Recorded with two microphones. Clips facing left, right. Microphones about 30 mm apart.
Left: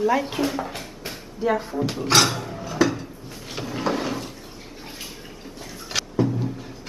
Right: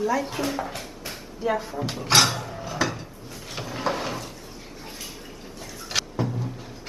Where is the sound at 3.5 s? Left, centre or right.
Centre.